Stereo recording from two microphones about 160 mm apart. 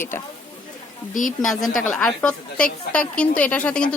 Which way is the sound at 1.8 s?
5° left (ahead or behind).